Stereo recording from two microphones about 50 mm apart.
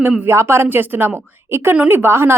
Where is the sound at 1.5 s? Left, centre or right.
Right.